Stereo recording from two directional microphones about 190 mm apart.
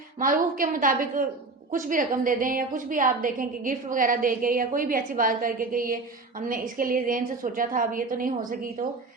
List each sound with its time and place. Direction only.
0.2 s a woman's voice: 45° right (ahead or behind)